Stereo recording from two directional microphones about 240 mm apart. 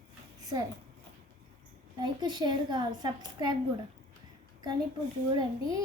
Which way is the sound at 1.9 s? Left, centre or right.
Centre.